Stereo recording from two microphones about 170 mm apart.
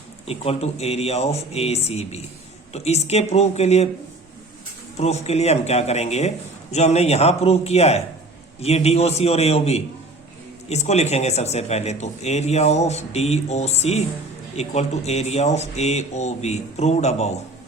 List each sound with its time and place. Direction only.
0.3 s speech: 35° left (ahead or behind)
4.9 s speech: 40° left (ahead or behind)